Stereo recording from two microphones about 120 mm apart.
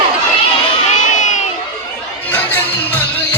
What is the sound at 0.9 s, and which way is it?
Crowd, 90° left.